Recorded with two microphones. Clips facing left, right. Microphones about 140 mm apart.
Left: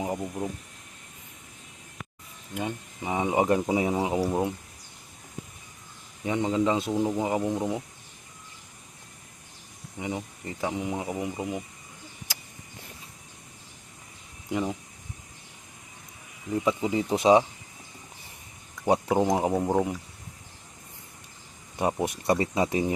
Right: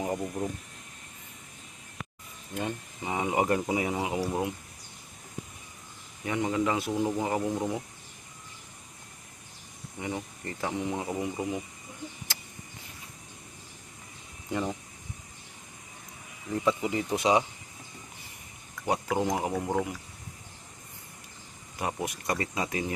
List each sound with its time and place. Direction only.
0.0 s speech: 10° left (ahead or behind)
2.6 s speech: 15° left (ahead or behind)
6.2 s speech: 20° left (ahead or behind)
10.0 s speech: 15° left (ahead or behind)
14.5 s speech: centre (ahead or behind)
16.6 s speech: 20° left (ahead or behind)
18.9 s speech: 30° left (ahead or behind)
21.8 s speech: 30° left (ahead or behind)